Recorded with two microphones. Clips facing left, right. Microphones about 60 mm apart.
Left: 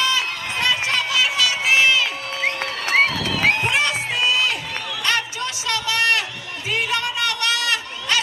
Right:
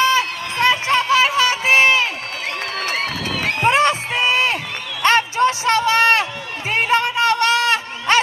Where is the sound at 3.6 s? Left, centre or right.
Right.